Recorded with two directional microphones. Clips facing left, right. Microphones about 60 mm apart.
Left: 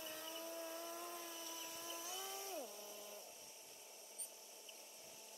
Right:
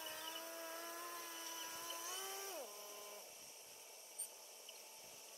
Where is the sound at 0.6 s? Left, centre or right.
Right.